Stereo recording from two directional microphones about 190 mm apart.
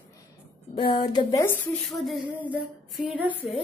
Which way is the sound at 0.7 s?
30° left (ahead or behind).